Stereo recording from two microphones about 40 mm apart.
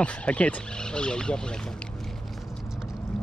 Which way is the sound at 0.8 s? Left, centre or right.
Left.